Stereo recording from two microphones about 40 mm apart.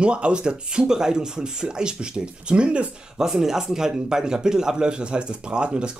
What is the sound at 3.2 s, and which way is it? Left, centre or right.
Speech, centre.